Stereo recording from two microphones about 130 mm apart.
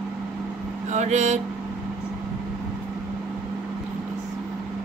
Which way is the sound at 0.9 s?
60° right (ahead or behind).